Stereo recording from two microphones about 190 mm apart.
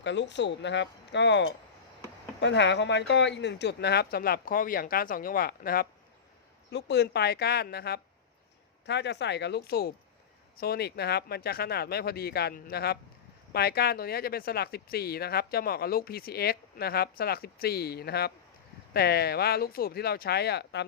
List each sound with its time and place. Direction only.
0.0 s speech: 70° left (ahead or behind); by 5.9 s 50° left (ahead or behind)
6.7 s speech: 65° left (ahead or behind)